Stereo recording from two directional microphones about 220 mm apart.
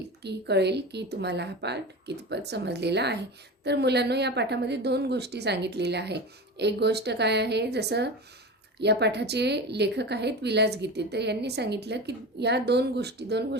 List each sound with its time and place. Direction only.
0.2 s a woman's voice: 50° right (ahead or behind)